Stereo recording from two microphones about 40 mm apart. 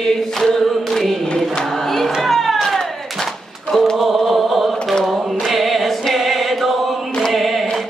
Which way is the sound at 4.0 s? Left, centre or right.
Centre.